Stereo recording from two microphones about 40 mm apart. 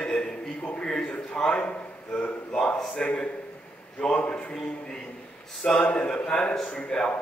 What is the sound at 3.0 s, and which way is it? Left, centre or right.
A man's voice, centre.